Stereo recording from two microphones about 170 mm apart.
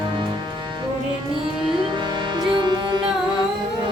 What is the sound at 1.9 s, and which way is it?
Music, 30° right (ahead or behind).